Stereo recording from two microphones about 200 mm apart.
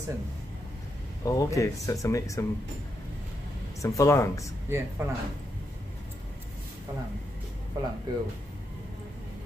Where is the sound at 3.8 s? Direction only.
15° left (ahead or behind).